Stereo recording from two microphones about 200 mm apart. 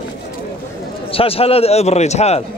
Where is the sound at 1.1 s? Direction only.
30° left (ahead or behind).